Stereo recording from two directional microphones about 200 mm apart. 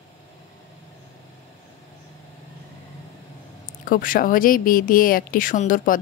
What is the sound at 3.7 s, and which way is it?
Speech, 45° left (ahead or behind).